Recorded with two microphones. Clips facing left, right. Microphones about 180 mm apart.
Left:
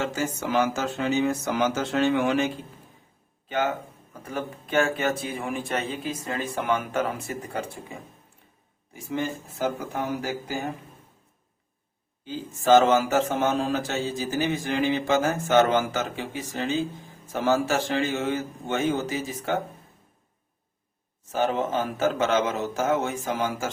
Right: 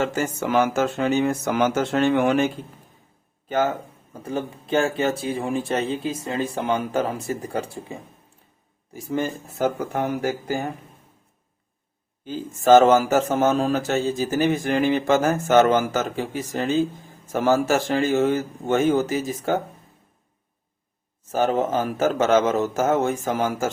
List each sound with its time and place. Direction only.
0.0 s speech: 50° right (ahead or behind)
3.5 s speech: 40° right (ahead or behind)
4.1 s speech: 30° right (ahead or behind); by 10.6 s 50° right (ahead or behind)
12.2 s speech: 45° right (ahead or behind)
21.3 s speech: 40° right (ahead or behind)